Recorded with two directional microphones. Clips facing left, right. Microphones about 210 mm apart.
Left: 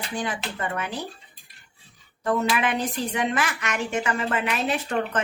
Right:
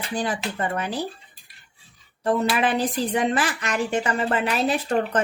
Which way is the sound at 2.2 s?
35° right (ahead or behind).